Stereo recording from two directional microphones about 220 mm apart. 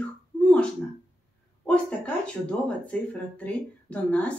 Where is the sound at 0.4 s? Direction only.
5° left (ahead or behind).